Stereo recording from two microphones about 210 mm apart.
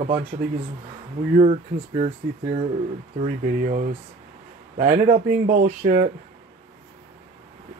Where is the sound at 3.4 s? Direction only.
40° right (ahead or behind).